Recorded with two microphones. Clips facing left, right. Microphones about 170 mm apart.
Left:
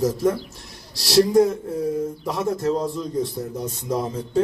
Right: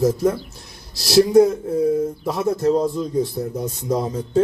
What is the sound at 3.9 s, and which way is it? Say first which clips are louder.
Speech: right 3 dB; 25° right (ahead or behind).